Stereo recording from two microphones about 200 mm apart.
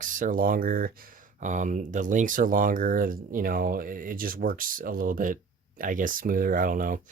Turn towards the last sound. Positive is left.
turn(degrees=-45)  # may be behind; listen again after turning